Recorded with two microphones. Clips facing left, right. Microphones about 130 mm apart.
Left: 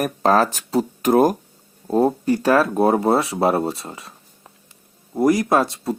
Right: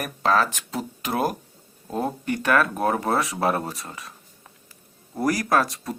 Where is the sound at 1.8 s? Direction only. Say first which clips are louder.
Left 10 dB; 35° left (ahead or behind).